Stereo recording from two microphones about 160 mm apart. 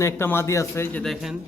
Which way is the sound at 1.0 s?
Centre (ahead or behind).